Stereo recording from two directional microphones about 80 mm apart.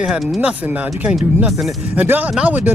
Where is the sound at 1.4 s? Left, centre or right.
Centre.